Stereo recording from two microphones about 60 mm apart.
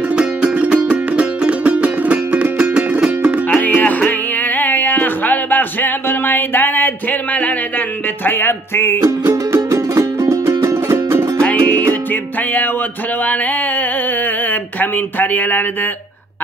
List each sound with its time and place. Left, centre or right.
0.1 s music: centre
3.4 s music: left
9.0 s music: right
11.4 s music: left
13.2 s a sound: left